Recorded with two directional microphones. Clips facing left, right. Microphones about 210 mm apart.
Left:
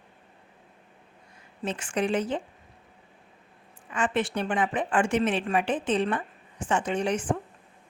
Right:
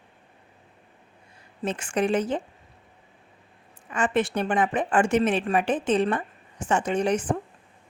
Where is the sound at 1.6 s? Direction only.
45° right (ahead or behind).